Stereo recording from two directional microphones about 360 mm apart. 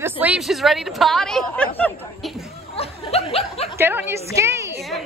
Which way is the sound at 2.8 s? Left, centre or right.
Centre.